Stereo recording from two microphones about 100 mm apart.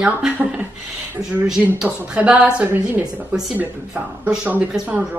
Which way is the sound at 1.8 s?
10° right (ahead or behind).